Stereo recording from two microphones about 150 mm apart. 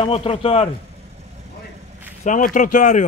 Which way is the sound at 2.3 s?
60° left (ahead or behind).